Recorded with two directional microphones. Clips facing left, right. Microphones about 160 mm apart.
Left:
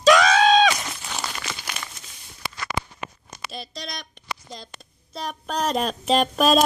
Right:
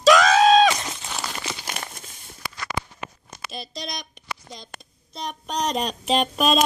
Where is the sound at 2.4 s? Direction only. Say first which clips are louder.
Left 1 dB; 25° left (ahead or behind).